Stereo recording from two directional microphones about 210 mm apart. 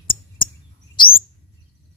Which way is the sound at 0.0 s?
25° left (ahead or behind).